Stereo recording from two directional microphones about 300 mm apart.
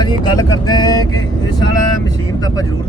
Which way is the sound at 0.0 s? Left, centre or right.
Centre.